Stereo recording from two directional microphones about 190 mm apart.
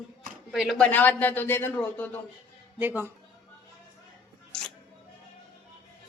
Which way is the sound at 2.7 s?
10° right (ahead or behind).